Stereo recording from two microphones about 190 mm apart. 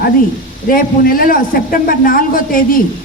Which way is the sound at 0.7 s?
50° left (ahead or behind).